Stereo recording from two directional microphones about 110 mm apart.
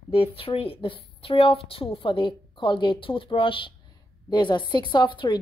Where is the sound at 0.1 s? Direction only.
55° left (ahead or behind).